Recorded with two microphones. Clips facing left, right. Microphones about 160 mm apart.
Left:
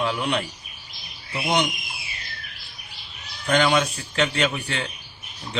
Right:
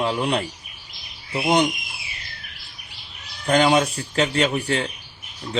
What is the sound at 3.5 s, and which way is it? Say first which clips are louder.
Speech: right 3 dB; 35° right (ahead or behind).